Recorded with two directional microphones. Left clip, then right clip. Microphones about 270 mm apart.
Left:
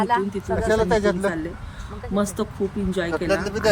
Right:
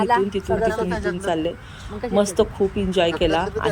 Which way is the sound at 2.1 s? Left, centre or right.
Centre.